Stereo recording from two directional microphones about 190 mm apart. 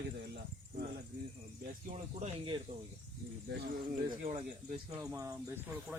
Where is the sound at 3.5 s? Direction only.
55° right (ahead or behind).